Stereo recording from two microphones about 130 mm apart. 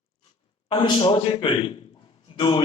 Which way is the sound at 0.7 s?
40° left (ahead or behind).